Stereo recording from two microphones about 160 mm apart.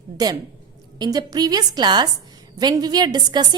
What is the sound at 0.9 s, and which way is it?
A woman's voice, 25° right (ahead or behind).